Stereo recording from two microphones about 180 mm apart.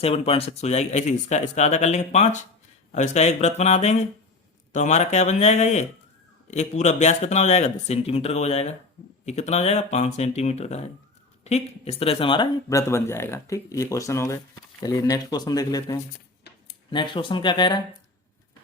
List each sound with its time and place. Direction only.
0.0 s speech: 35° left (ahead or behind)